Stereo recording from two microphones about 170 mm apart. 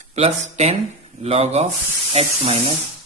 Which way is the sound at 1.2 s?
40° right (ahead or behind).